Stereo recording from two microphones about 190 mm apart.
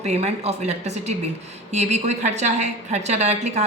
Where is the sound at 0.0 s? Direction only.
35° right (ahead or behind).